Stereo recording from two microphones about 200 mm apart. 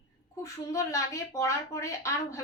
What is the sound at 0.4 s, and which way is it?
A woman's voice, 15° left (ahead or behind).